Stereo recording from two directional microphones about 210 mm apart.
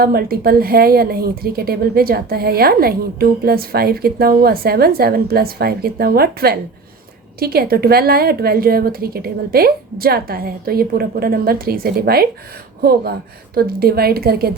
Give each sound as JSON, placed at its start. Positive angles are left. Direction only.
{"t": 0.0, "sound": "a woman's voice", "side_deg": -45}